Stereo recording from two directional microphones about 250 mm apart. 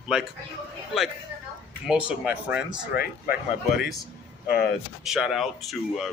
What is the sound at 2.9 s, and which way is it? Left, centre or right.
Speech, left.